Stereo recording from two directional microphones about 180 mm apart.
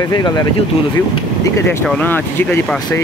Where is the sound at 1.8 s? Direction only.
10° left (ahead or behind).